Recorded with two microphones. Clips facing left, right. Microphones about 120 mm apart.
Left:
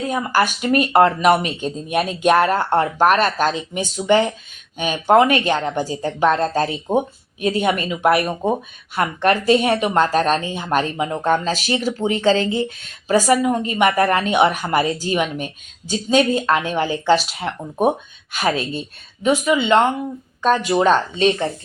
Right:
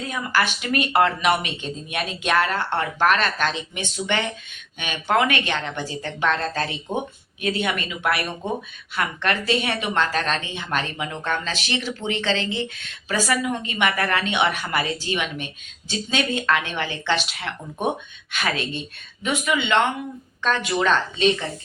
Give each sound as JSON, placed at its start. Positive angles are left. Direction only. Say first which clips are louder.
{"t": 0.1, "sound": "speech", "louder": "left 4 dB", "side_deg": 40}
{"t": 9.0, "sound": "speech", "louder": "left 5 dB", "side_deg": 30}
{"t": 9.5, "sound": "speech", "louder": "left 8 dB", "side_deg": 45}